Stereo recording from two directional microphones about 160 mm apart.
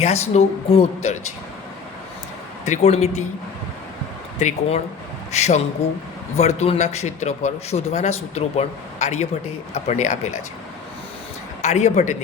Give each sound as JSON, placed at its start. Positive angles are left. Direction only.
{"t": 0.0, "sound": "a man's voice", "side_deg": 40}
{"t": 2.6, "sound": "a man's voice", "side_deg": 45}
{"t": 4.4, "sound": "a man's voice", "side_deg": 45}
{"t": 11.6, "sound": "a man's voice", "side_deg": 45}